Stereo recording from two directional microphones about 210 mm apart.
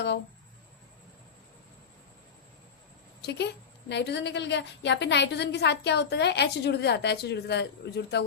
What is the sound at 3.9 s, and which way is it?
A woman's voice, 55° left (ahead or behind).